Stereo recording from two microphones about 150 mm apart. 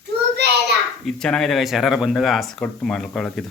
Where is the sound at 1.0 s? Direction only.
5° left (ahead or behind).